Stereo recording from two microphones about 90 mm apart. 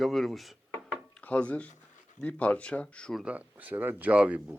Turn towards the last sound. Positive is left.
turn(degrees=-15)  # may be behind; listen again after turning